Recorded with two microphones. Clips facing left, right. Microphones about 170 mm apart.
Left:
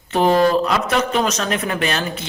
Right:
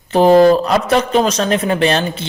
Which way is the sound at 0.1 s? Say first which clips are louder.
Right 6 dB; 35° right (ahead or behind).